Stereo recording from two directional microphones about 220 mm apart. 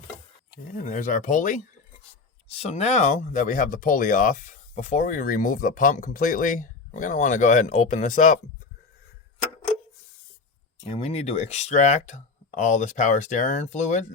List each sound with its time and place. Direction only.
0.7 s speech: 35° left (ahead or behind)
10.8 s speech: 30° left (ahead or behind)